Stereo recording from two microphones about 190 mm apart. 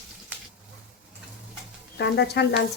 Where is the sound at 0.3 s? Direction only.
10° right (ahead or behind).